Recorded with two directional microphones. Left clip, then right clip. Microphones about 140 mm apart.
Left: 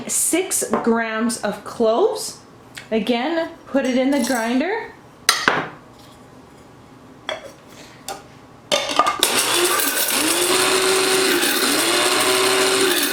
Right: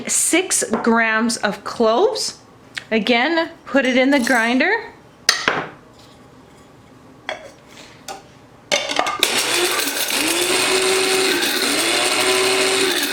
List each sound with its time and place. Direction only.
0.0 s speech: 25° right (ahead or behind)
7.3 s dishes: 5° left (ahead or behind)
8.7 s coin: centre (ahead or behind)